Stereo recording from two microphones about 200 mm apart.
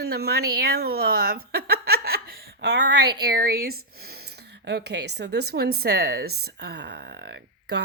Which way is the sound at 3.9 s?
50° right (ahead or behind).